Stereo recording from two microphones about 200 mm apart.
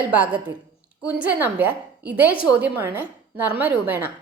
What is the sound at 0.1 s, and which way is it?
A woman's voice, 10° right (ahead or behind).